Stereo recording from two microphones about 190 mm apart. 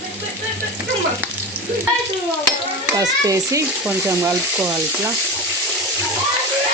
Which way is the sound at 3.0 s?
15° right (ahead or behind).